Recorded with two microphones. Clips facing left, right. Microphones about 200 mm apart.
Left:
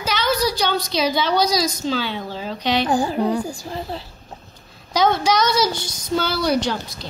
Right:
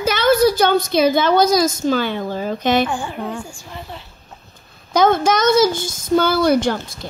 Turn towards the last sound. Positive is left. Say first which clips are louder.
# right 5 dB
turn(degrees=-50)  # may be behind; listen again after turning